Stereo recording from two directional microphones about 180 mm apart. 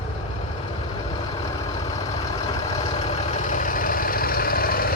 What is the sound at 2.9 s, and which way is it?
Vehicle, 40° left (ahead or behind).